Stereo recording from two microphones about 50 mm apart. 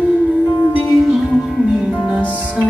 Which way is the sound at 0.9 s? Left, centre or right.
Centre.